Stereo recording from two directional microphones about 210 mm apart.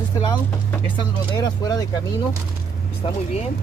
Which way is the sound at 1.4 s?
20° left (ahead or behind).